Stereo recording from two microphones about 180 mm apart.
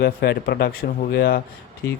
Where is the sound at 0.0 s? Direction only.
60° left (ahead or behind).